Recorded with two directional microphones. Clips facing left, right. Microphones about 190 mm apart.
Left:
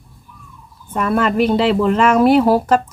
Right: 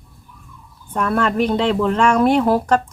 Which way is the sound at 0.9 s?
5° left (ahead or behind).